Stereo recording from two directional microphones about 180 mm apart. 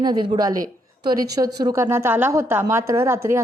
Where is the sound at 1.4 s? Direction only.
20° right (ahead or behind).